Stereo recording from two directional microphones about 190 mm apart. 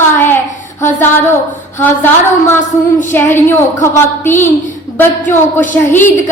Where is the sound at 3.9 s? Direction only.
40° left (ahead or behind).